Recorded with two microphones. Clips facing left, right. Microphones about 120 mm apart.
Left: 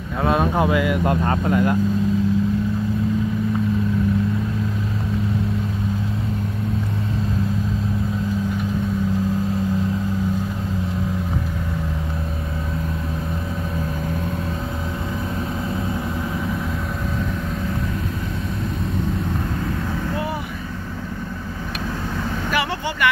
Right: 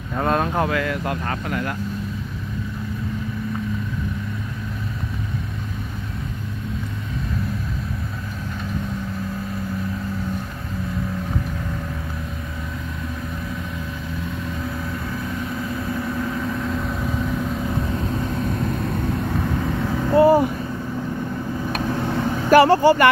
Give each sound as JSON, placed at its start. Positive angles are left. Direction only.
{"t": 0.2, "sound": "speech", "side_deg": 5}
{"t": 0.7, "sound": "speech", "side_deg": 15}
{"t": 15.9, "sound": "vehicle", "side_deg": 10}
{"t": 20.2, "sound": "vehicle", "side_deg": -40}
{"t": 22.5, "sound": "vehicle", "side_deg": -40}